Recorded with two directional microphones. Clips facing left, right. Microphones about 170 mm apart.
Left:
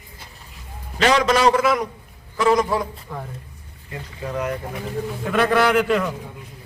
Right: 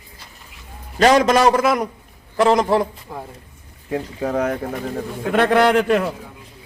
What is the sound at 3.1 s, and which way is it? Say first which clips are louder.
Speech: even; 25° right (ahead or behind).